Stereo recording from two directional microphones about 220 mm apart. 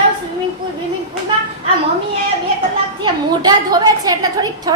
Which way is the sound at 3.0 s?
20° right (ahead or behind).